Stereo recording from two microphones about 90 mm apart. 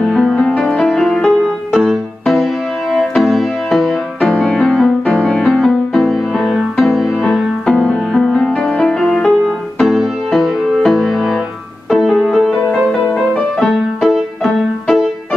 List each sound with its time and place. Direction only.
0.0 s music: 5° left (ahead or behind)
7.6 s music: 10° left (ahead or behind)